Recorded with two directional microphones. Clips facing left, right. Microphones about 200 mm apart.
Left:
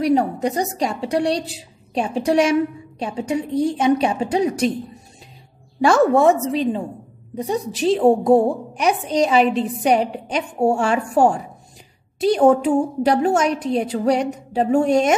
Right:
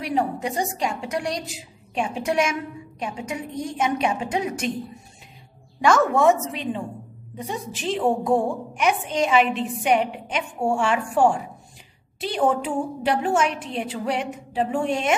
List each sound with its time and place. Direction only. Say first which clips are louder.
0.0 s a woman's voice: left 7 dB; 40° left (ahead or behind)
5.8 s a woman's voice: left 4 dB; 35° left (ahead or behind)